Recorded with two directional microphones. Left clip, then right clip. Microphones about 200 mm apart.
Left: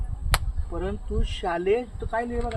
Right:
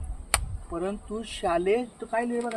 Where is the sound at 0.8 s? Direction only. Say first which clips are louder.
Left 1 dB; 35° right (ahead or behind).